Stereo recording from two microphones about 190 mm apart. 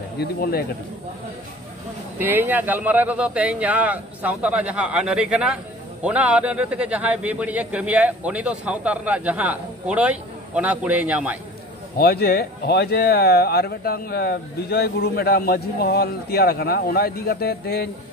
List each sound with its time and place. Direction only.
0.2 s speech: 55° left (ahead or behind)
2.1 s a man's voice: 10° right (ahead or behind)
12.0 s speech: 55° left (ahead or behind)